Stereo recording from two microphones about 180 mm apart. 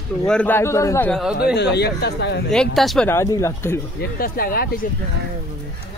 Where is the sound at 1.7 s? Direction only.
65° left (ahead or behind).